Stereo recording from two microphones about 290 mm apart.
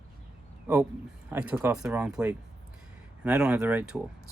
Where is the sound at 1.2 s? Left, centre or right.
Centre.